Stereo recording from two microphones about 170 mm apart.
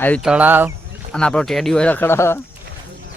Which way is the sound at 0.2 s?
5° right (ahead or behind).